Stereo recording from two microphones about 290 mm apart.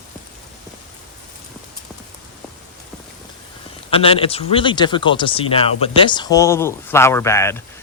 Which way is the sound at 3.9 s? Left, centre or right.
Centre.